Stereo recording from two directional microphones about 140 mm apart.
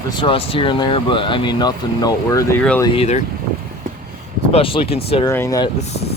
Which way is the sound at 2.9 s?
45° left (ahead or behind).